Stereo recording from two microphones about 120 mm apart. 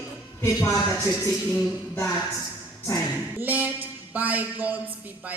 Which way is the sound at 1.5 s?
20° left (ahead or behind).